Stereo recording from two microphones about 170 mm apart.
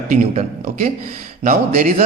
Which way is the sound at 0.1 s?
50° right (ahead or behind).